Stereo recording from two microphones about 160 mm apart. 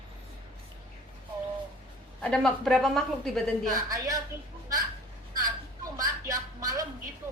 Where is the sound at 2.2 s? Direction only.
5° left (ahead or behind).